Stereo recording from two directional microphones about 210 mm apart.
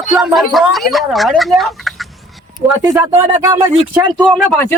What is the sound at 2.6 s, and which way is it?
Speech, 30° right (ahead or behind).